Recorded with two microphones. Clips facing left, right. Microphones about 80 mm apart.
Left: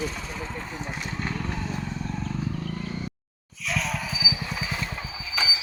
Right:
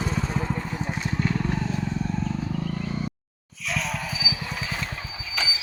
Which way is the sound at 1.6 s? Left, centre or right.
Centre.